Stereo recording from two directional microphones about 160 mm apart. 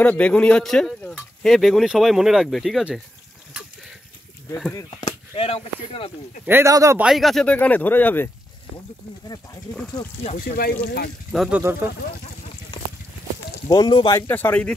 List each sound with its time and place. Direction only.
0.0 s speech: 10° left (ahead or behind)
5.3 s speech: 35° left (ahead or behind)
6.4 s speech: 15° right (ahead or behind)
7.0 s speech: centre (ahead or behind)
10.4 s speech: 70° left (ahead or behind); by 11.1 s 85° left
11.3 s speech: 5° right (ahead or behind)
12.7 s a sound: 30° left (ahead or behind)
13.7 s speech: 25° left (ahead or behind)
14.2 s speech: 10° left (ahead or behind)